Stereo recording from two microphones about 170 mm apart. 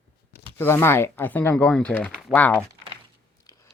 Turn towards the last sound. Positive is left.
turn(degrees=20)  # may be behind; listen again after turning